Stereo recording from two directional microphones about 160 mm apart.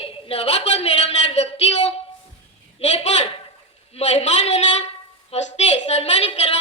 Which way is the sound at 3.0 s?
45° left (ahead or behind).